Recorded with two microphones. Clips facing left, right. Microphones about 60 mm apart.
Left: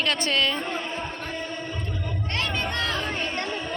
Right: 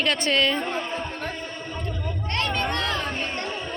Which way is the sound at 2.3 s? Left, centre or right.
Right.